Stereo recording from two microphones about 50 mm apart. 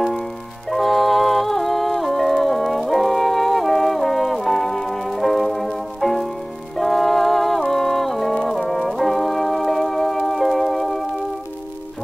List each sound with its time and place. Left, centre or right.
0.7 s music: centre